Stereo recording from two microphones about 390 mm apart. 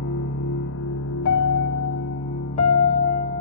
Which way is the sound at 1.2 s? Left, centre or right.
Left.